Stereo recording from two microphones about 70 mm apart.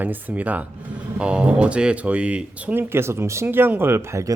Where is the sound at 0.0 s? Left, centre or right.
Right.